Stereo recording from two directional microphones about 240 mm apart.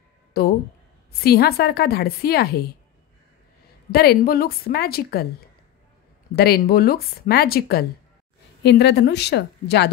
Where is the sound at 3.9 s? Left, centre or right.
Left.